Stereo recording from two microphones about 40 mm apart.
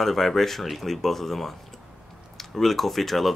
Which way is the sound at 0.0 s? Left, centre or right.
Centre.